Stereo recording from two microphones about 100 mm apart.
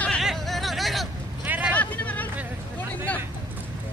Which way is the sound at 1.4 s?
15° right (ahead or behind).